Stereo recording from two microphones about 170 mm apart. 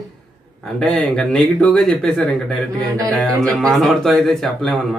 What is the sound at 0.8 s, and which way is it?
Speech, 5° left (ahead or behind).